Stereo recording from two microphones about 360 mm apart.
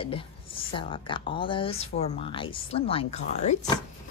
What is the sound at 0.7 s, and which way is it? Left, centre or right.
Speech, centre.